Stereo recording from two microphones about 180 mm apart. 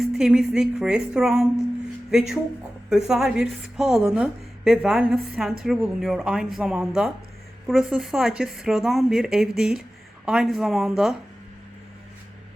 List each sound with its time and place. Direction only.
0.0 s a woman's voice: centre (ahead or behind)